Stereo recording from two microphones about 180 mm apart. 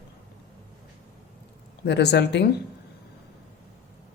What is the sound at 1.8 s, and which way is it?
Speech, 70° left (ahead or behind).